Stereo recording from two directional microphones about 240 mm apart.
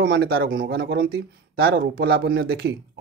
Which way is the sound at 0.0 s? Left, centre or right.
Right.